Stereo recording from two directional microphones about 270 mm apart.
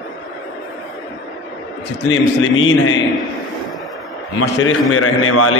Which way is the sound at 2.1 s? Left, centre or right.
Left.